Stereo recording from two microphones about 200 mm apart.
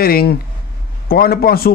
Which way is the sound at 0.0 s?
50° left (ahead or behind).